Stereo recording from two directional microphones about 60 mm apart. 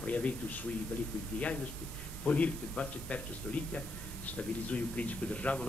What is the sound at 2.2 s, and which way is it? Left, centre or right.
A man's voice, left.